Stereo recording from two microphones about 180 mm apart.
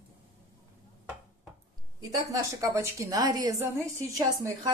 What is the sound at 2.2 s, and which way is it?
A woman's voice, 20° right (ahead or behind).